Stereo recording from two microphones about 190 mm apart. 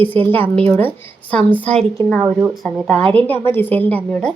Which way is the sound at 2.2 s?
10° right (ahead or behind).